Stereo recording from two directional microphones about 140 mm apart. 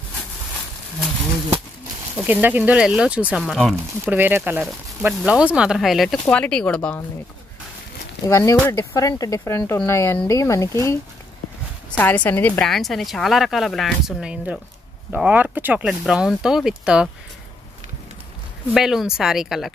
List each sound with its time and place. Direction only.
2.1 s speech: 10° right (ahead or behind)
4.1 s a woman's voice: 15° right (ahead or behind); by 7.0 s 10° left (ahead or behind)
8.3 s speech: 20° left (ahead or behind)
12.0 s a woman's voice: 10° left (ahead or behind); by 17.1 s 5° right (ahead or behind)
18.7 s a woman's voice: centre (ahead or behind)